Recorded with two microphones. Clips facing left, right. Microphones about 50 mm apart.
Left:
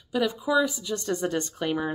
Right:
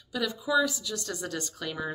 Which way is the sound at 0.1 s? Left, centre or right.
Left.